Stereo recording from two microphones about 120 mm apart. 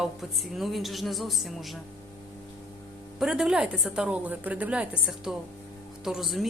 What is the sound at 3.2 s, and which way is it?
A woman's voice, 5° right (ahead or behind).